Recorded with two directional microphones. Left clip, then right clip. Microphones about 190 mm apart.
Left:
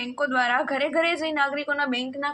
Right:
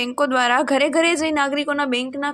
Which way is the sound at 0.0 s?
50° right (ahead or behind).